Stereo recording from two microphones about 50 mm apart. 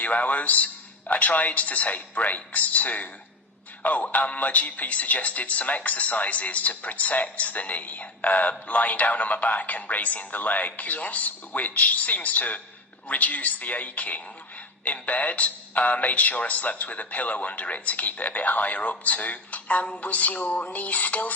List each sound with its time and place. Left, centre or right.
0.0 s speech: left